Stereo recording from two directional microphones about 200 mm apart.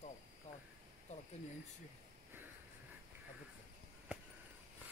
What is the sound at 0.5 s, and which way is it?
Cricket, 35° left (ahead or behind).